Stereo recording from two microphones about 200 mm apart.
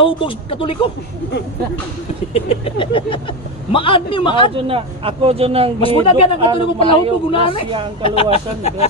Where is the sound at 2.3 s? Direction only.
30° left (ahead or behind).